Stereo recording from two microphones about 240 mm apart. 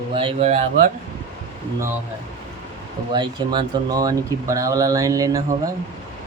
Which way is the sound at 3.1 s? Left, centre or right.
Centre.